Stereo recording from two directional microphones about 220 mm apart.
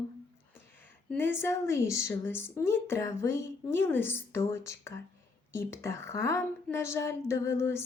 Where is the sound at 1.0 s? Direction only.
10° left (ahead or behind).